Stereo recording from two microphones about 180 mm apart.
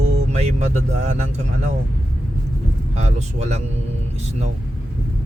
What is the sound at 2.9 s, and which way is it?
Speech, 40° right (ahead or behind).